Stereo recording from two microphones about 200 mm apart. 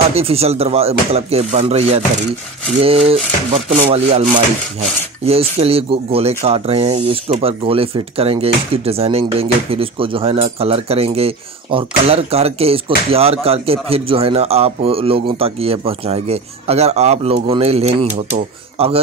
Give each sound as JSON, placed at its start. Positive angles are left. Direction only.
{"t": 0.1, "sound": "speech", "side_deg": -30}